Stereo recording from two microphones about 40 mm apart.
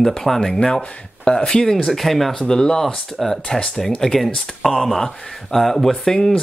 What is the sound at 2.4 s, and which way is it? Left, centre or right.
Speech, centre.